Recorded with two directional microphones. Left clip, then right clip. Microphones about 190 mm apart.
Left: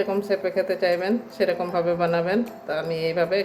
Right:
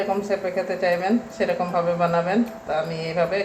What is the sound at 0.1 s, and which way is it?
A woman's voice, 50° left (ahead or behind).